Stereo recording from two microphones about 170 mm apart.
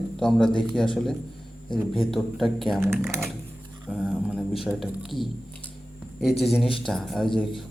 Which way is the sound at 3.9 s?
Centre (ahead or behind).